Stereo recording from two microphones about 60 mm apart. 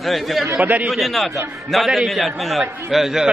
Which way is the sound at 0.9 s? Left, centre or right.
Centre.